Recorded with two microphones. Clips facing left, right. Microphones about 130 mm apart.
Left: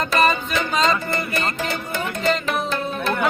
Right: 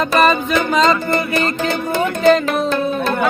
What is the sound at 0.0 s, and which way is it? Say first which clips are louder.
Music: right 5 dB; 70° right (ahead or behind).